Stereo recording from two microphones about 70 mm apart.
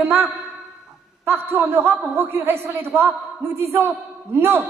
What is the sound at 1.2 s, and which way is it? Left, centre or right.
A man's voice, right.